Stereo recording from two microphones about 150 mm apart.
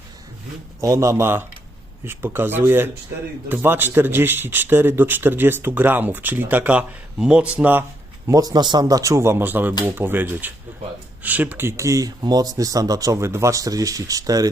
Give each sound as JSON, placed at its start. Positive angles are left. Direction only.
{"t": 0.8, "sound": "a man's voice", "side_deg": -20}
{"t": 8.3, "sound": "a man's voice", "side_deg": -25}